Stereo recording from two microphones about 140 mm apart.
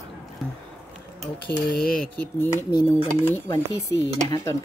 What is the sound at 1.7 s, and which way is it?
Speech, 90° left.